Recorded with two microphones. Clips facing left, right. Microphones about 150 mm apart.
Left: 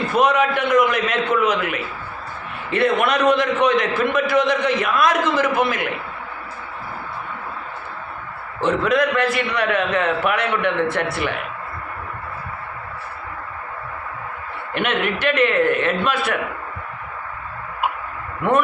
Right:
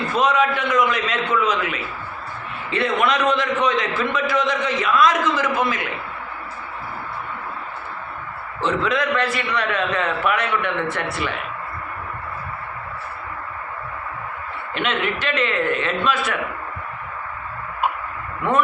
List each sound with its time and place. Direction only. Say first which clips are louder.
0.2 s a man's voice: left 2 dB; 60° left (ahead or behind)
8.6 s a man's voice: left 3 dB; 50° left (ahead or behind)
14.7 s a man's voice: left 2 dB; 55° left (ahead or behind)